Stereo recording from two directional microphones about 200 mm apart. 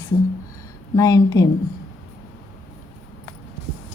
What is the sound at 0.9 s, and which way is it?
Speech, 15° left (ahead or behind).